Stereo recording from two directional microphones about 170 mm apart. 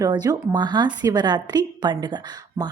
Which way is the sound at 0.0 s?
20° right (ahead or behind).